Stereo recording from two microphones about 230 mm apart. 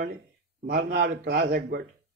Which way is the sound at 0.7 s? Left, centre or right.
Right.